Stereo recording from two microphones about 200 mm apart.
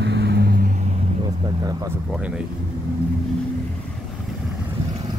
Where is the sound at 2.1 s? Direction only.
5° right (ahead or behind).